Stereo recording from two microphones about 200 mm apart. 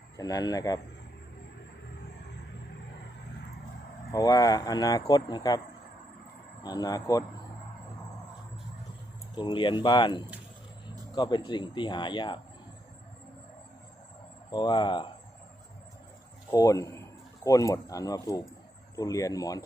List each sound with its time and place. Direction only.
0.2 s speech: 20° left (ahead or behind)
4.1 s speech: 20° left (ahead or behind)
9.3 s speech: 25° left (ahead or behind)
14.5 s speech: 20° left (ahead or behind)
16.5 s speech: 15° left (ahead or behind)